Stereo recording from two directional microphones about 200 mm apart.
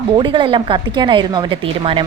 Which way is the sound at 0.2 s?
25° right (ahead or behind).